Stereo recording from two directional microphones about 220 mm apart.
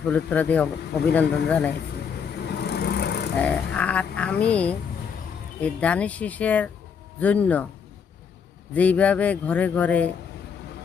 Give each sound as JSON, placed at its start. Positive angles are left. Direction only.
{"t": 0.1, "sound": "speech", "side_deg": 5}
{"t": 2.6, "sound": "vehicle", "side_deg": 45}
{"t": 3.3, "sound": "speech", "side_deg": 5}
{"t": 8.7, "sound": "speech", "side_deg": 5}